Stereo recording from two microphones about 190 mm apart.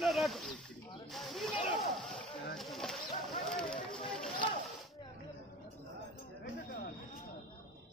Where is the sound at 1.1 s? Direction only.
Centre (ahead or behind).